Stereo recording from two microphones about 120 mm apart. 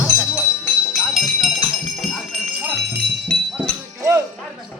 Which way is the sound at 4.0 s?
25° right (ahead or behind).